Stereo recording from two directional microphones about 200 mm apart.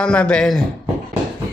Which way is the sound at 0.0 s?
5° left (ahead or behind).